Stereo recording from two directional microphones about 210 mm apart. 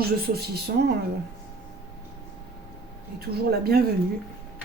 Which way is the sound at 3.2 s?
50° right (ahead or behind).